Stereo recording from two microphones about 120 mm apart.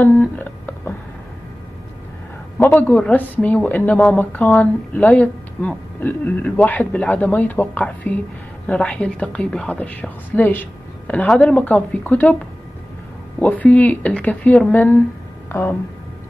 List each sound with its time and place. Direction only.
0.0 s a sound: 15° left (ahead or behind)
2.6 s a woman's voice: 15° left (ahead or behind)
13.4 s a woman's voice: 10° left (ahead or behind)